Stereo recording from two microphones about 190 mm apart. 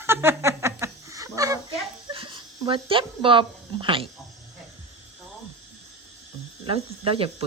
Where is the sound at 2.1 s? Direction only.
25° right (ahead or behind).